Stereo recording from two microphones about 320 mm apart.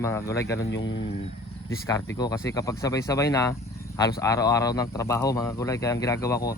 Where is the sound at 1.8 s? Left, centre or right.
Centre.